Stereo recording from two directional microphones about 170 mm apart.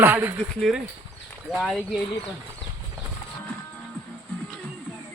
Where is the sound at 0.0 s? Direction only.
10° right (ahead or behind).